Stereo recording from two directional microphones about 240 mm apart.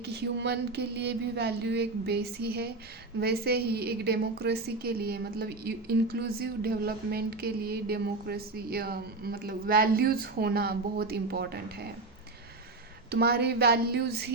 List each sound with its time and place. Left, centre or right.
0.0 s a sound: right
3.2 s a woman's voice: right
13.1 s a woman's voice: right